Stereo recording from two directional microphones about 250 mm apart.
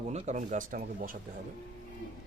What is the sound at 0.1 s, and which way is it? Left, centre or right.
Speech, right.